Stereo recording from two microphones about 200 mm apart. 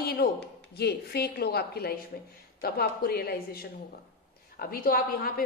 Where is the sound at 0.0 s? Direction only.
50° left (ahead or behind).